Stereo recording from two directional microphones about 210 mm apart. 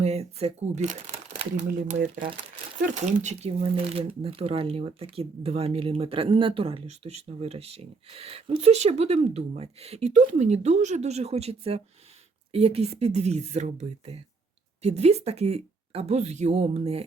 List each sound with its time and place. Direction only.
0.0 s speech: 30° right (ahead or behind)